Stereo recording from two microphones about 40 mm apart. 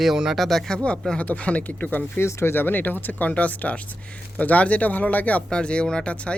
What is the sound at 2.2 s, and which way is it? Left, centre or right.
Speech, left.